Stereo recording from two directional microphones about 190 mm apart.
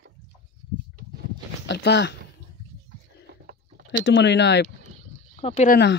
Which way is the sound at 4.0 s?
70° left (ahead or behind).